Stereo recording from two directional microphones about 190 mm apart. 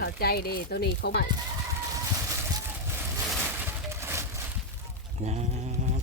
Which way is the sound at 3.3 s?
10° right (ahead or behind).